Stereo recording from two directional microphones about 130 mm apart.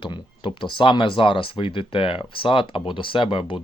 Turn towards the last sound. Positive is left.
turn(degrees=40)  # may be behind; listen again after turning